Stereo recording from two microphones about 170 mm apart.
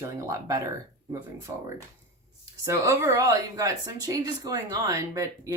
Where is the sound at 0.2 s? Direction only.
20° right (ahead or behind).